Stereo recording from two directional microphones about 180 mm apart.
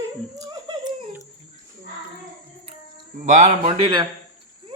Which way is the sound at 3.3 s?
40° right (ahead or behind).